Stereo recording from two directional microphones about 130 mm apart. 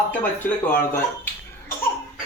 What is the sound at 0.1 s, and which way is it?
Speech, 15° left (ahead or behind).